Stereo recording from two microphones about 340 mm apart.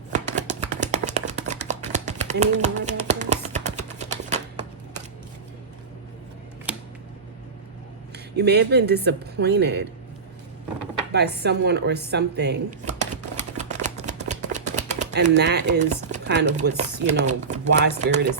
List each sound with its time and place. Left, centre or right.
0.8 s a sound: right
6.7 s a sound: centre
8.1 s speech: right
11.1 s speech: right
13.6 s shuffling cards: right
17.5 s speech: right